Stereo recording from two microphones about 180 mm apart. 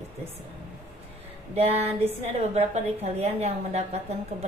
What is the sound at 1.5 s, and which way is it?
A woman's voice, 35° right (ahead or behind).